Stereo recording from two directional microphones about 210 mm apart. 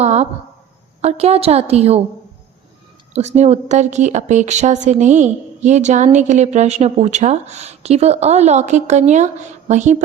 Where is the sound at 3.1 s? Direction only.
30° right (ahead or behind).